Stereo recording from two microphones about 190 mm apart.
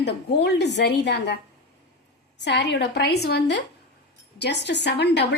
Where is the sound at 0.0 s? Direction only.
60° left (ahead or behind).